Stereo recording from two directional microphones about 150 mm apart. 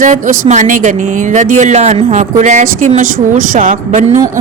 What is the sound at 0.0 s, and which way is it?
A woman's voice, 60° right (ahead or behind).